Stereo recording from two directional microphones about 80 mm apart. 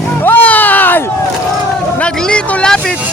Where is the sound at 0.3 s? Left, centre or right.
Left.